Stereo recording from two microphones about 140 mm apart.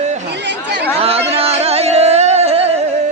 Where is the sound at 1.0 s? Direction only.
45° right (ahead or behind).